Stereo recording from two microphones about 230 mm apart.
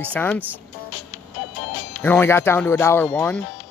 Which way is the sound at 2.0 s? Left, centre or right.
Centre.